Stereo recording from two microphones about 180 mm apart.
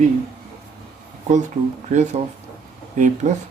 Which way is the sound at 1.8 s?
40° right (ahead or behind).